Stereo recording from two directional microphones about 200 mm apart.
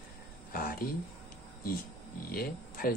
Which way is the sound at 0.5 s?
45° left (ahead or behind).